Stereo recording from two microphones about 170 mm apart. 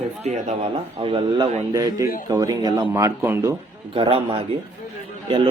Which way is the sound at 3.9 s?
30° right (ahead or behind).